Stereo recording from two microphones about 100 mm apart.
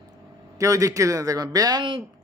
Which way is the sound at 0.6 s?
35° right (ahead or behind).